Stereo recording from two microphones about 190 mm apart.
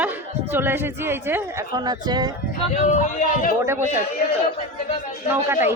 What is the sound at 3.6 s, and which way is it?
Speech, 15° right (ahead or behind).